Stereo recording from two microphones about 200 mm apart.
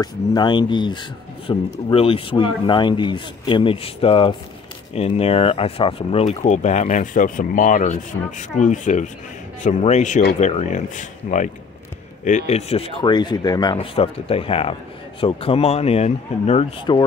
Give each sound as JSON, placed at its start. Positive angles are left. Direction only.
{"t": 0.0, "sound": "speech", "side_deg": 20}